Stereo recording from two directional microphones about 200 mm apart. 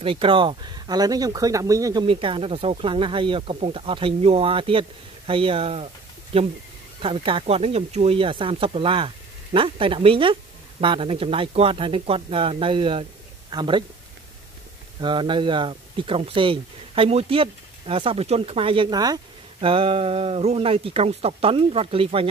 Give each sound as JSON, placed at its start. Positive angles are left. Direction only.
{"t": 0.0, "sound": "speech", "side_deg": -25}
{"t": 15.0, "sound": "speech", "side_deg": -25}